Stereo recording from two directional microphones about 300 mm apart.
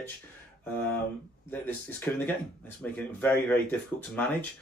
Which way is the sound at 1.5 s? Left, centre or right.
Centre.